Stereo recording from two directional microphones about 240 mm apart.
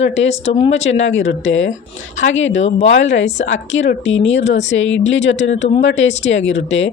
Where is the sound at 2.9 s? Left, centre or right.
Left.